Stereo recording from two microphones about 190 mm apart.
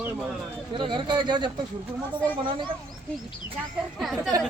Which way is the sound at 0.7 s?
25° right (ahead or behind).